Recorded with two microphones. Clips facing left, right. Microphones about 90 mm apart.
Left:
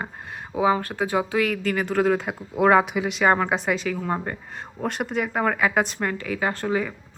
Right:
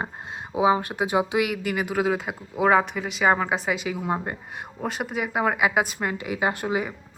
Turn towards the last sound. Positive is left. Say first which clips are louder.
# left 1 dB
turn(degrees=-15)  # may be behind; listen again after turning